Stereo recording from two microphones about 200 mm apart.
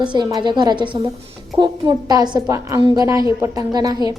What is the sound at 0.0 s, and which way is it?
A woman's voice, 20° right (ahead or behind).